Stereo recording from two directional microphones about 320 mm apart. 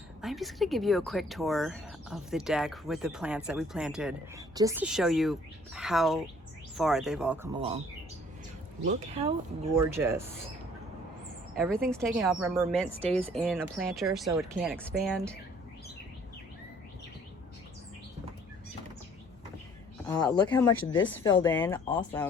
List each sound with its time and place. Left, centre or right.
0.2 s speech: centre
7.5 s speech: centre
8.9 s speech: centre
9.8 s speech: centre
11.5 s speech: centre
20.1 s speech: centre